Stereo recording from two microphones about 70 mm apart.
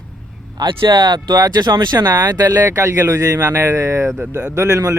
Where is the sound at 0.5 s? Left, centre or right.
Right.